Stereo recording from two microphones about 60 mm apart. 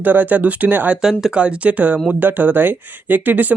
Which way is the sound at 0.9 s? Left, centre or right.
Centre.